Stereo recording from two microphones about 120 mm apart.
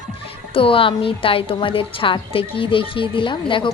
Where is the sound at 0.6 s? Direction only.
50° left (ahead or behind).